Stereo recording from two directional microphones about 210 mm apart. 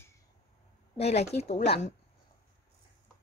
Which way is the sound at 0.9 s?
30° left (ahead or behind).